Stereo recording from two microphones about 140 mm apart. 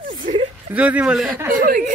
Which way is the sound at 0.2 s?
65° right (ahead or behind).